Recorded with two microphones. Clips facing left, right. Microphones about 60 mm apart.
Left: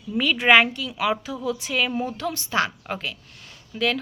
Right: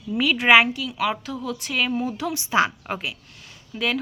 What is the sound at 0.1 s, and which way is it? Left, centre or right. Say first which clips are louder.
Speech: right 1 dB; centre.